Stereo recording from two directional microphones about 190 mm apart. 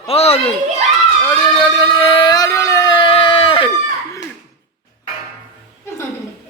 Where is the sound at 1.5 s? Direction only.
25° left (ahead or behind).